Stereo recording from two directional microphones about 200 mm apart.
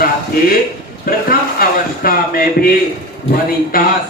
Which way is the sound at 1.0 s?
45° left (ahead or behind).